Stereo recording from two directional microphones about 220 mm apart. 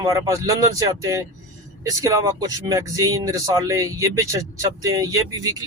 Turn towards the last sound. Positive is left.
turn(degrees=-15)  # may be behind; listen again after turning